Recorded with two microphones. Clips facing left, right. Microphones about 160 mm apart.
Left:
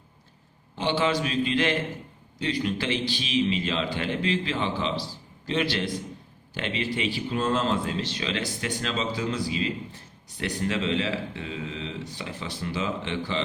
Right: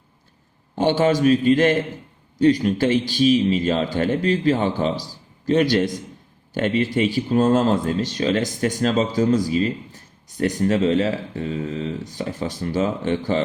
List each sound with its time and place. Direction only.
0.8 s speech: 45° right (ahead or behind)